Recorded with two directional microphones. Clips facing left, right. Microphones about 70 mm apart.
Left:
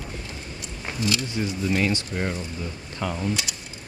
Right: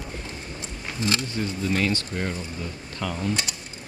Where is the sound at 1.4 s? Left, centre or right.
Centre.